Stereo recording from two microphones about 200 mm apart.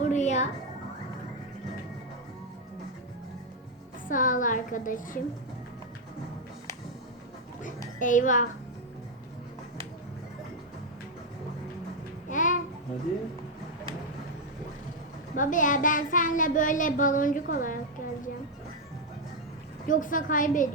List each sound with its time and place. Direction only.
0.0 s music: 35° left (ahead or behind)
4.1 s a woman's voice: 40° left (ahead or behind)
7.9 s a child's voice: 40° left (ahead or behind)
12.3 s babbling: 40° left (ahead or behind)
15.4 s a child's voice: 40° left (ahead or behind)
19.9 s a child's voice: 40° left (ahead or behind)